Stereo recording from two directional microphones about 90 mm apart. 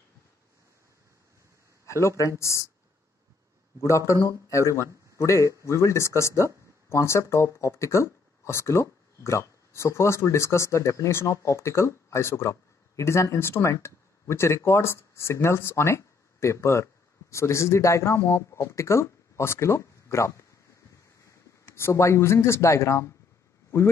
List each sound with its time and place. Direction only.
1.9 s speech: 35° left (ahead or behind)
4.1 s speech: 35° left (ahead or behind)
21.7 s speech: 30° left (ahead or behind)